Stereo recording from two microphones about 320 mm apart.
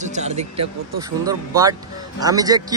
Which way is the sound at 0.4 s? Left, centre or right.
Centre.